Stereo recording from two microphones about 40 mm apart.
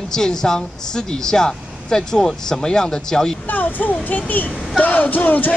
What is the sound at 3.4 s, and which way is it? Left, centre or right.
Speech, left.